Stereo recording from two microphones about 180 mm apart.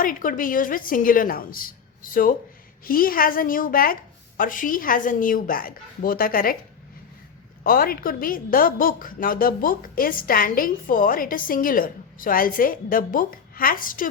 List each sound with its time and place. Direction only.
0.0 s a woman's voice: 50° left (ahead or behind)
7.6 s a woman's voice: 55° left (ahead or behind)